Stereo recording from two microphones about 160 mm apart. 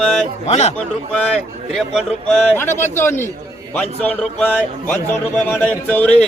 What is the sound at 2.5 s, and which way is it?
A man's voice, 15° left (ahead or behind).